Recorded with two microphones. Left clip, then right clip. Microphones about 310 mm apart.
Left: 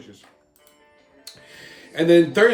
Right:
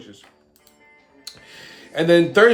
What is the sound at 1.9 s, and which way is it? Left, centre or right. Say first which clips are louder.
Speech: right 1 dB; centre.